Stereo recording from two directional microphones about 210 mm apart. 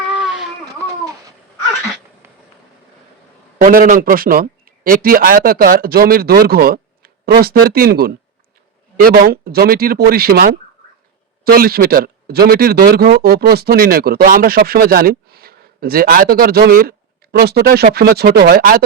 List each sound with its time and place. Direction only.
3.6 s a man's voice: 40° right (ahead or behind)